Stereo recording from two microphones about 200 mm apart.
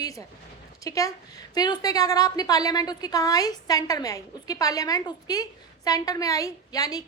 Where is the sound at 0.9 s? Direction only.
15° left (ahead or behind).